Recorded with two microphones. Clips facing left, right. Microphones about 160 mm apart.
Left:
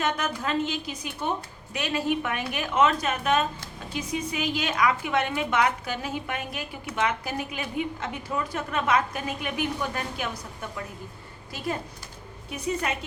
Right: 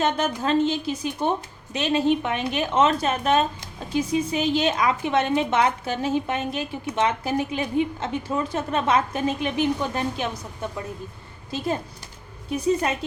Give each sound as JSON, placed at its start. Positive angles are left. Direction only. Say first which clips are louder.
{"t": 0.0, "sound": "a woman's voice", "louder": "right 5 dB", "side_deg": -30}